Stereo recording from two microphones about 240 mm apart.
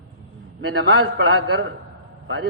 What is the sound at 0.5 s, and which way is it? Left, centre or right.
A man's voice, right.